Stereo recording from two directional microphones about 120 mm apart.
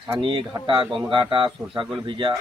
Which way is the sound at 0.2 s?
45° right (ahead or behind).